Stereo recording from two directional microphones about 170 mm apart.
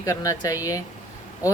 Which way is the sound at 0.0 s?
20° left (ahead or behind).